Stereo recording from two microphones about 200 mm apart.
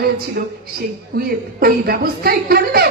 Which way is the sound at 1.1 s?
50° right (ahead or behind).